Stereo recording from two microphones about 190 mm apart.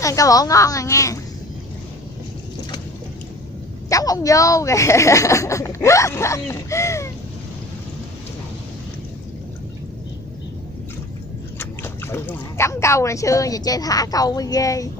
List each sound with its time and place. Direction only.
0.0 s speech: 15° left (ahead or behind)
3.9 s speech: 20° left (ahead or behind)
11.5 s speech: 10° left (ahead or behind)